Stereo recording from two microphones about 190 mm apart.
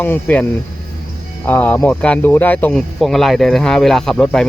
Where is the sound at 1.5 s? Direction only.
10° left (ahead or behind).